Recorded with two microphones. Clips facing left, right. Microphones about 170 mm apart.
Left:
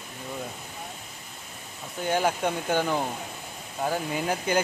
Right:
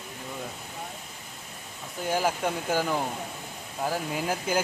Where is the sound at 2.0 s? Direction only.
Centre (ahead or behind).